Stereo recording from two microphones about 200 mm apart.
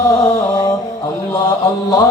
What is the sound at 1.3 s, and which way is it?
Music, 15° left (ahead or behind).